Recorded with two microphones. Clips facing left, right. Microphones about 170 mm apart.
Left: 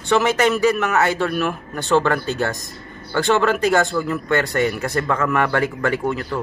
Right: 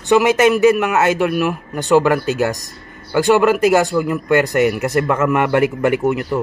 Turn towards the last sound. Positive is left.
turn(degrees=-20)  # may be behind; listen again after turning